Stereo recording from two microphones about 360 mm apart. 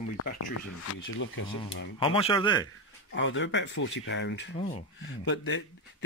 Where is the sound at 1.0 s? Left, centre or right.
Left.